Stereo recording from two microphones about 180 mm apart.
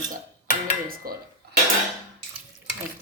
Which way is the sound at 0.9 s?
55° right (ahead or behind).